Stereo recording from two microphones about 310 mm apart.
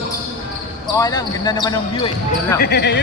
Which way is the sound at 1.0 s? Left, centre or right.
Centre.